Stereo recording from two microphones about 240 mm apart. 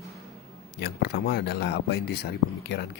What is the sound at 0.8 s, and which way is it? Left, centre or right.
A man's voice, left.